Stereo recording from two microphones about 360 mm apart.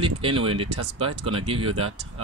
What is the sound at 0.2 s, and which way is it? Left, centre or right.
Speech, centre.